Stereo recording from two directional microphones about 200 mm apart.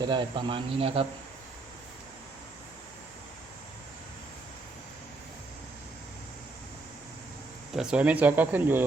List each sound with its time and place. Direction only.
0.0 s speech: 25° right (ahead or behind)
7.7 s speech: 5° right (ahead or behind)